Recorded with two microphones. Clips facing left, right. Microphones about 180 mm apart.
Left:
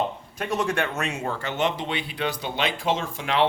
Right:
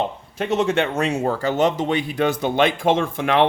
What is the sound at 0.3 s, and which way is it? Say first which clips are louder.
Speech: right 6 dB; 25° right (ahead or behind).